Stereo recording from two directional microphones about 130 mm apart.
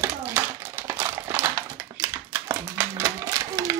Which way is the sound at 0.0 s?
15° right (ahead or behind).